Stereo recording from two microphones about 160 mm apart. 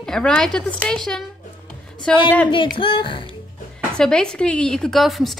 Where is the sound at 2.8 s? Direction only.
30° left (ahead or behind).